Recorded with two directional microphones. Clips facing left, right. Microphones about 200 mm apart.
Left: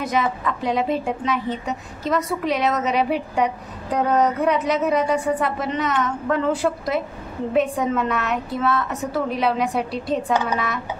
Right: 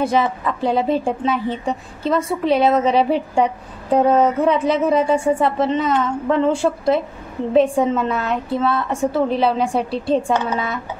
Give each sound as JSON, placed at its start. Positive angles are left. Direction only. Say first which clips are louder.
{"t": 0.0, "sound": "a woman's voice", "louder": "right 4 dB", "side_deg": -30}